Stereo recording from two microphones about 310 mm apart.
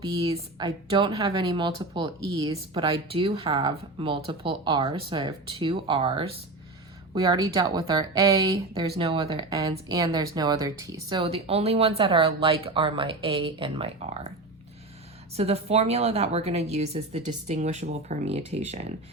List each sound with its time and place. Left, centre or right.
0.0 s speech: centre
15.4 s a woman's voice: centre